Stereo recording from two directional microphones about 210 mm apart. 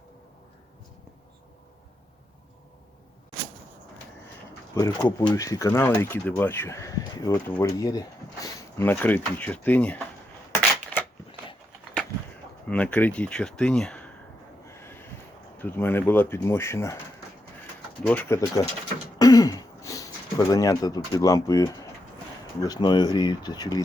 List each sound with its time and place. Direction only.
4.7 s speech: 20° left (ahead or behind)
10.9 s shuffling cards: 5° left (ahead or behind)
12.6 s speech: 5° left (ahead or behind)
15.5 s speech: 10° left (ahead or behind)
18.0 s speech: 10° left (ahead or behind)
19.2 s throat clearing: 15° left (ahead or behind)
22.6 s speech: 20° left (ahead or behind)